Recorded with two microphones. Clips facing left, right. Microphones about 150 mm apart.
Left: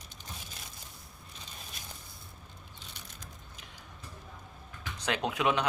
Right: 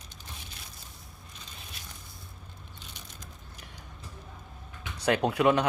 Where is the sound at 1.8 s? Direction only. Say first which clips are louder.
Even; 45° left (ahead or behind).